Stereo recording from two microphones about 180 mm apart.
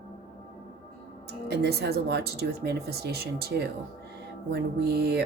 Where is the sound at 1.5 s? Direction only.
65° right (ahead or behind).